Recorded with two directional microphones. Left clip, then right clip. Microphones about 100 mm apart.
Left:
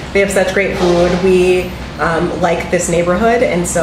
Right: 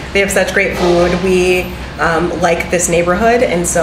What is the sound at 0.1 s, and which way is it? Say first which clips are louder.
A woman's voice: even; 25° right (ahead or behind).